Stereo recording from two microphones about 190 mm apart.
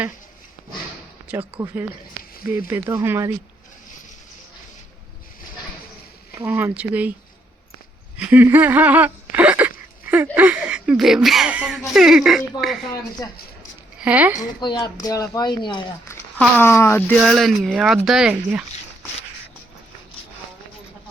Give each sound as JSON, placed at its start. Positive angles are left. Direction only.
{"t": 1.3, "sound": "speech", "side_deg": -10}
{"t": 6.4, "sound": "speech", "side_deg": -10}
{"t": 8.2, "sound": "a sound", "side_deg": -10}
{"t": 10.3, "sound": "speech", "side_deg": -10}
{"t": 13.2, "sound": "speech", "side_deg": 15}
{"t": 14.0, "sound": "speech", "side_deg": -5}
{"t": 14.6, "sound": "speech", "side_deg": 20}
{"t": 16.6, "sound": "speech", "side_deg": 15}
{"t": 17.2, "sound": "speech", "side_deg": 0}